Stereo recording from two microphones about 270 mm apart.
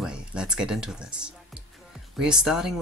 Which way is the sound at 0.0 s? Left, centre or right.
Centre.